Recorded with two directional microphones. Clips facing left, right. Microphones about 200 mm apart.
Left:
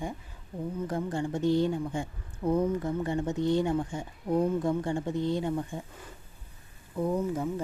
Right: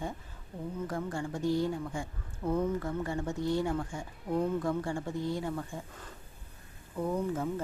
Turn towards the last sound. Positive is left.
turn(degrees=10)  # may be behind; listen again after turning